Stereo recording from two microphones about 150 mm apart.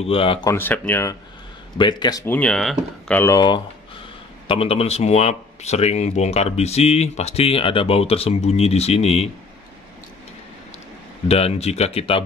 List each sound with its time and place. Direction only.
0.0 s speech: 35° left (ahead or behind)
0.5 s speech: 15° left (ahead or behind)
1.8 s speech: 30° left (ahead or behind)
2.2 s speech: 10° left (ahead or behind)
3.2 s speech: 25° left (ahead or behind)
4.5 s speech: 40° left (ahead or behind)
11.2 s speech: 45° left (ahead or behind)